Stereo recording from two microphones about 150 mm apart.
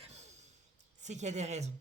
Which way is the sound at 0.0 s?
50° right (ahead or behind).